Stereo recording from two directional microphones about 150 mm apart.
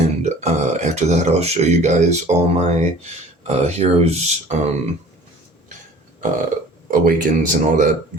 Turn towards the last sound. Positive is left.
turn(degrees=-60)  # may be behind; listen again after turning